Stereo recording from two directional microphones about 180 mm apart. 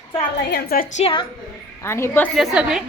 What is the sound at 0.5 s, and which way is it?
Speech, 55° left (ahead or behind).